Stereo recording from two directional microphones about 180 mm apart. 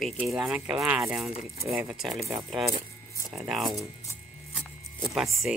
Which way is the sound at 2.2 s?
30° right (ahead or behind).